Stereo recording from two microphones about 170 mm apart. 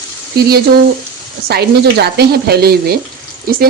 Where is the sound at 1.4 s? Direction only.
70° right (ahead or behind).